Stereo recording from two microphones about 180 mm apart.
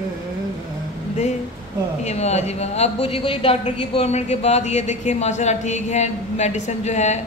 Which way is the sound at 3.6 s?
35° left (ahead or behind).